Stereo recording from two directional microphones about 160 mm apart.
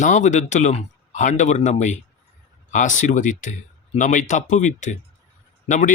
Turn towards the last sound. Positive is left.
turn(degrees=50)  # may be behind; listen again after turning